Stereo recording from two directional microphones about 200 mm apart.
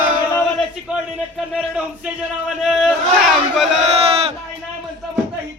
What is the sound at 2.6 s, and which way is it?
Chant, centre (ahead or behind).